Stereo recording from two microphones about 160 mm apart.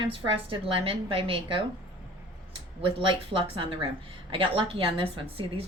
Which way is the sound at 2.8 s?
30° right (ahead or behind).